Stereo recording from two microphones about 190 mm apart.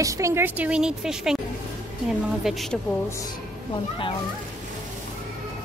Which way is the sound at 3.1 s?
15° left (ahead or behind).